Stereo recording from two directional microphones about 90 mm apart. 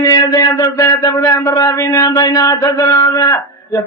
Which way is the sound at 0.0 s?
50° left (ahead or behind).